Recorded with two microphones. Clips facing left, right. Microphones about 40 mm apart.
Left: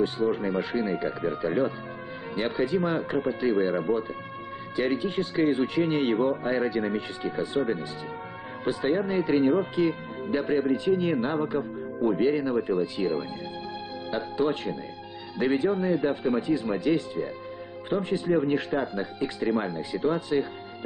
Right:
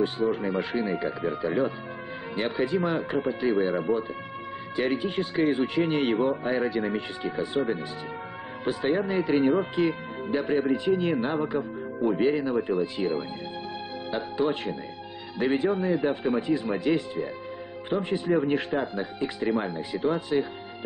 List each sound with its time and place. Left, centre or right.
0.2 s speech: centre
0.6 s speech: centre
1.0 s speech: centre
4.7 s speech: centre
8.6 s speech: centre
10.3 s speech: centre
11.5 s speech: centre
17.8 s speech: centre